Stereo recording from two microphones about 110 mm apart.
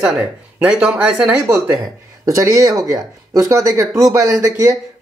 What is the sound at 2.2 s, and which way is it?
Speech, 30° right (ahead or behind).